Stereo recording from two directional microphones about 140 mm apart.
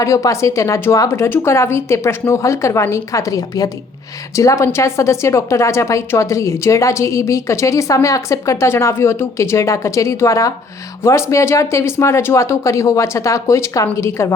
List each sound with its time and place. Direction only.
0.0 s a woman's voice: 20° left (ahead or behind)